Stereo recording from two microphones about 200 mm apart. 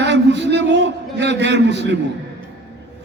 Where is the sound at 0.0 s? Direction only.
60° right (ahead or behind).